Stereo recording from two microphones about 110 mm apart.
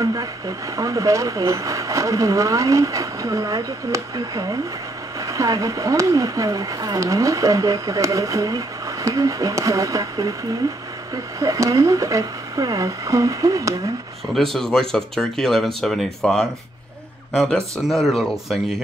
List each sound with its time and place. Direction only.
0.0 s speech: 35° right (ahead or behind)
11.3 s speech: 30° right (ahead or behind)
14.3 s speech: 5° left (ahead or behind)